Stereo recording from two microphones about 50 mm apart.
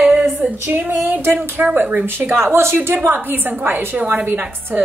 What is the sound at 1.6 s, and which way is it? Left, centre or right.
Speech, right.